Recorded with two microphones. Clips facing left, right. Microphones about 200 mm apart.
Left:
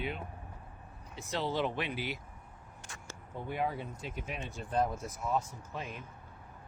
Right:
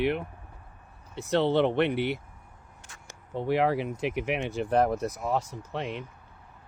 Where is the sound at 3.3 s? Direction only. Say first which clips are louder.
Right 10 dB; 75° right (ahead or behind).